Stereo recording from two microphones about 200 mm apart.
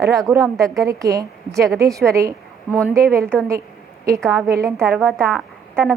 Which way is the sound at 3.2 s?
5° left (ahead or behind).